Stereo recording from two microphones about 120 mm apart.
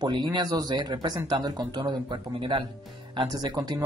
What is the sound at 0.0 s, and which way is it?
Speech, 35° right (ahead or behind).